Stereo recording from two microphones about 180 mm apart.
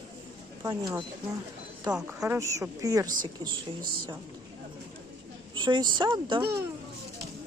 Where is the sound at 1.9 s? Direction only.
10° right (ahead or behind).